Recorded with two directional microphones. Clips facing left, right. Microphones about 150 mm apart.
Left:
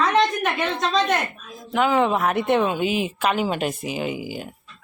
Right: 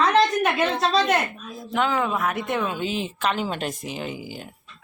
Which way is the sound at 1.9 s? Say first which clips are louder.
Left 5 dB; 30° left (ahead or behind).